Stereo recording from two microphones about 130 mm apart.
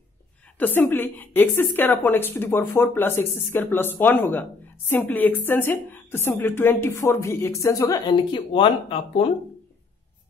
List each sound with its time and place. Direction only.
0.6 s a woman's voice: 15° left (ahead or behind)
8.3 s speech: 40° left (ahead or behind)